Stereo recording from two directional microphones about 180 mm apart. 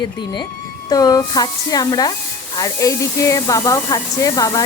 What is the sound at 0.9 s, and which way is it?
Speech, 20° left (ahead or behind).